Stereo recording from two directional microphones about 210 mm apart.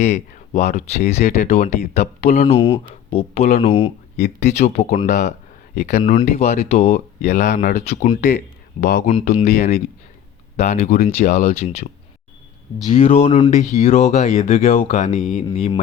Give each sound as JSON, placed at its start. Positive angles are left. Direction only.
{"t": 0.0, "sound": "speech", "side_deg": 35}
{"t": 12.9, "sound": "speech", "side_deg": 35}
{"t": 15.4, "sound": "speech", "side_deg": 25}